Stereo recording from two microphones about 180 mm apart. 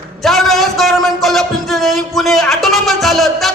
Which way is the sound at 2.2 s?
Centre (ahead or behind).